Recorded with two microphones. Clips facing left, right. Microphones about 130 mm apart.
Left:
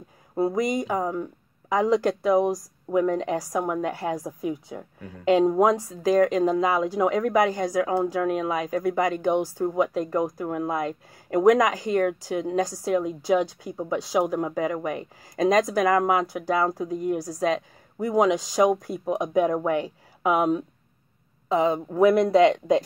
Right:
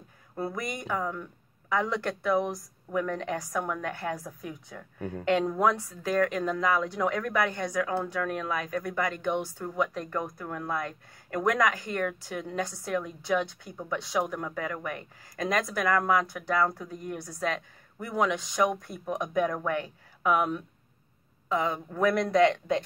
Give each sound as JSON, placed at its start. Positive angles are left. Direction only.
{"t": 0.5, "sound": "speech", "side_deg": 20}
{"t": 1.0, "sound": "speech", "side_deg": 35}
{"t": 1.7, "sound": "speech", "side_deg": 20}
{"t": 9.4, "sound": "speech", "side_deg": 35}
{"t": 9.9, "sound": "speech", "side_deg": 20}
{"t": 16.4, "sound": "speech", "side_deg": 30}
{"t": 18.0, "sound": "speech", "side_deg": 20}